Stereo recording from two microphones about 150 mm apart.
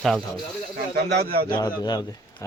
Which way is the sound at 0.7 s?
90° right.